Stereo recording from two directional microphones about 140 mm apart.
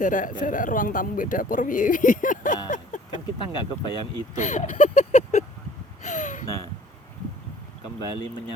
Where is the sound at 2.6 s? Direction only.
65° left (ahead or behind).